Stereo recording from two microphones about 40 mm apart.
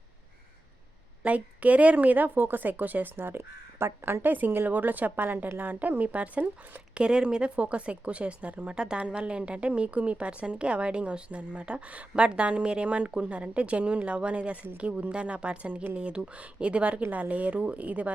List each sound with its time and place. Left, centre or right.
1.2 s a woman's voice: right
3.3 s speech: right
4.2 s a woman's voice: right
6.9 s a woman's voice: right
15.7 s a woman's voice: right
16.0 s a woman's voice: right